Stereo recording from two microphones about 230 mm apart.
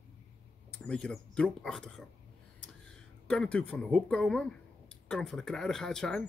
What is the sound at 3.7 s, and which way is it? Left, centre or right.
A man's voice, centre.